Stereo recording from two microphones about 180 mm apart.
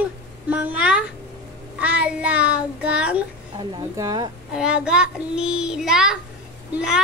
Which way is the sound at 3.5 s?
20° right (ahead or behind).